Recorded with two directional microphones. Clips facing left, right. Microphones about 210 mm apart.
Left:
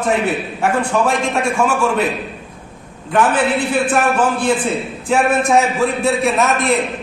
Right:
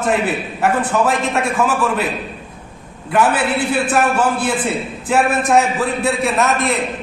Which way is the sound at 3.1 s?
5° right (ahead or behind).